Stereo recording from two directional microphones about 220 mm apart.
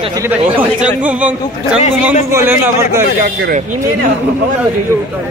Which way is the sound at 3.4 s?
35° right (ahead or behind).